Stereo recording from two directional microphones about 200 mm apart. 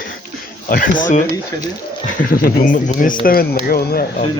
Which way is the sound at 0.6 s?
45° left (ahead or behind).